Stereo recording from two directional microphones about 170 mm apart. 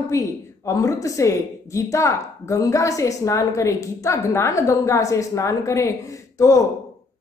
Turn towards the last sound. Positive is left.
turn(degrees=20)  # may be behind; listen again after turning